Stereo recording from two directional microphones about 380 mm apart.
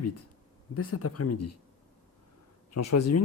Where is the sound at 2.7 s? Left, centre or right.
Left.